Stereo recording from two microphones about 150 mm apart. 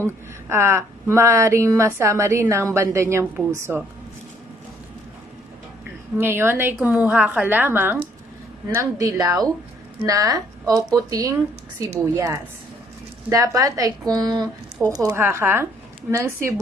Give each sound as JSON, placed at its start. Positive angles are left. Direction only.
{"t": 0.0, "sound": "a woman's voice", "side_deg": -15}
{"t": 6.1, "sound": "a woman's voice", "side_deg": -15}
{"t": 15.0, "sound": "a woman's voice", "side_deg": -15}